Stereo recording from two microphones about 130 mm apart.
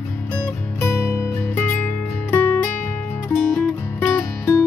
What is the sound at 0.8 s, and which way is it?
Music, 20° left (ahead or behind).